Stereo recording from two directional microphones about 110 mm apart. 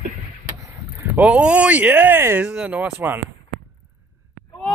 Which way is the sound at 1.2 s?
10° right (ahead or behind).